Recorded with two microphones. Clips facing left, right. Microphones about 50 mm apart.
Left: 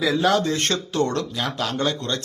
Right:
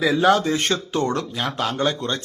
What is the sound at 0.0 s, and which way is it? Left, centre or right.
Speech, centre.